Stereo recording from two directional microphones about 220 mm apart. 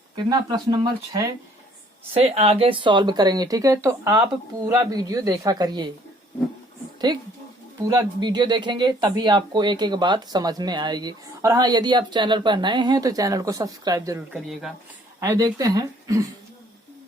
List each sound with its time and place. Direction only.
0.2 s speech: 15° right (ahead or behind)
2.3 s speech: 25° right (ahead or behind)
7.9 s speech: 20° right (ahead or behind)
14.3 s speech: centre (ahead or behind)
15.2 s speech: 15° right (ahead or behind)